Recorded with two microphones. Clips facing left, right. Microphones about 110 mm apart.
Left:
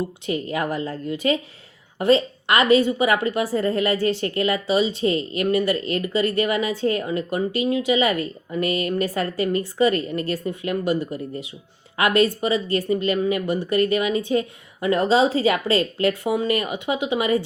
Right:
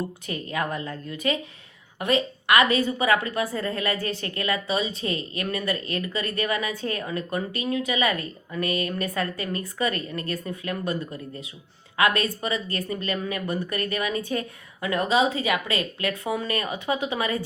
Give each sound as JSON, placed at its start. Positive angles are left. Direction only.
{"t": 0.3, "sound": "a woman's voice", "side_deg": 25}
{"t": 11.9, "sound": "a woman's voice", "side_deg": 25}